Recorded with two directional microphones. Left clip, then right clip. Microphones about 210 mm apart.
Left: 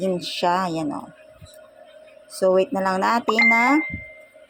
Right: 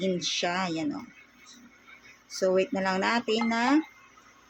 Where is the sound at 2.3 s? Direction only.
10° left (ahead or behind).